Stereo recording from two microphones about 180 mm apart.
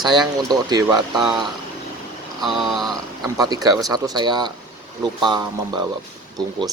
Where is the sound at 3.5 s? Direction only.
20° right (ahead or behind).